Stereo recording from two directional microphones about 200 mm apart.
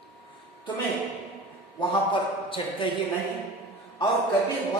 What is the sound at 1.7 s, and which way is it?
A man's voice, 25° left (ahead or behind).